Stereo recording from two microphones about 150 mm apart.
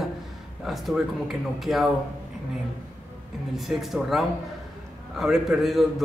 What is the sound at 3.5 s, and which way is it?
Speech, centre (ahead or behind).